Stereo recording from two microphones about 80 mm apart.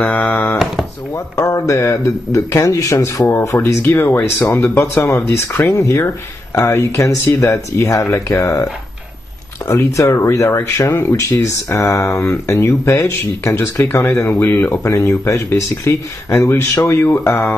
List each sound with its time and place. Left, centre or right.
0.0 s speech: left
1.1 s speech: left
9.7 s speech: left
14.8 s speech: left